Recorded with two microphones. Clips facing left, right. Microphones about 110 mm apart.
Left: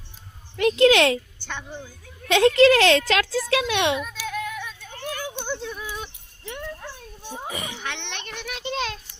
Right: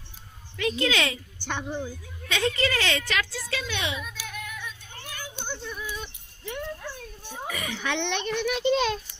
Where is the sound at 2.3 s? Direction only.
75° left (ahead or behind); by 4.5 s 90° left.